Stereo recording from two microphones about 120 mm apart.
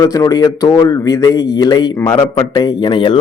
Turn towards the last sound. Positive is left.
turn(degrees=45)  # may be behind; listen again after turning